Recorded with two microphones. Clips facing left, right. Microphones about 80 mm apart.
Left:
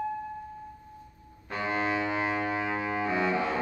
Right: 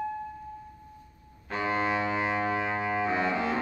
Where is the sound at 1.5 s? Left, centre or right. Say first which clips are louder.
Right 1 dB; centre.